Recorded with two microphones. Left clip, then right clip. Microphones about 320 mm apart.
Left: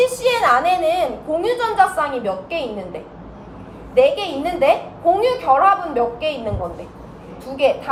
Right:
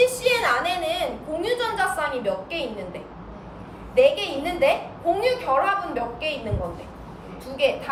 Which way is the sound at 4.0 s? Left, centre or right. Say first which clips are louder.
Left 3 dB; centre.